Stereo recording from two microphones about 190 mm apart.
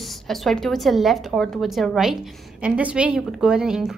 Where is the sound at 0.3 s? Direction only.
Centre (ahead or behind).